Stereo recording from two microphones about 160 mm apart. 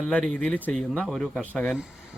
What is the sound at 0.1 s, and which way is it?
A man's voice, 5° left (ahead or behind).